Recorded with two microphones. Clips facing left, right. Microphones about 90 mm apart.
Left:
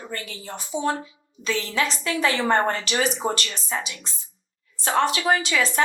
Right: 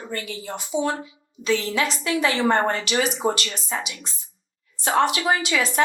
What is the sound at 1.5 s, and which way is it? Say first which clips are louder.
Speech: right 4 dB; 30° right (ahead or behind).